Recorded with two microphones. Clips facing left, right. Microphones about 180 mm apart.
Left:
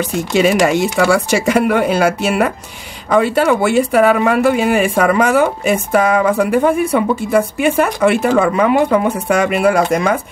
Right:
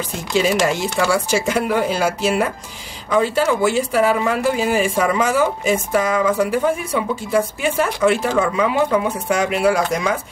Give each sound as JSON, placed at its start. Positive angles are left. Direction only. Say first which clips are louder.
{"t": 0.3, "sound": "speech", "louder": "left 4 dB", "side_deg": 65}